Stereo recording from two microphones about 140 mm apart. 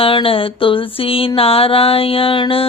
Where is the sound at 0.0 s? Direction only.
40° left (ahead or behind).